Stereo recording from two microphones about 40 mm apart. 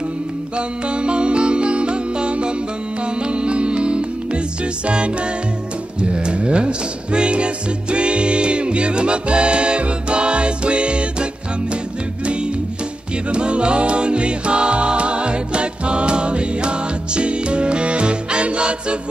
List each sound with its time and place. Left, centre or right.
0.6 s music: right
13.3 s music: right